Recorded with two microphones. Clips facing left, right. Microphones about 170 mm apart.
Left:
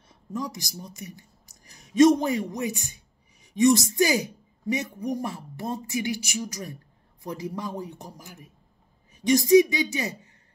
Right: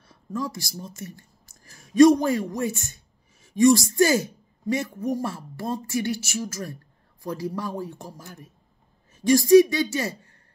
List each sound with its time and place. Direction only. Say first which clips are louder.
0.1 s a man's voice: right 2 dB; 20° left (ahead or behind)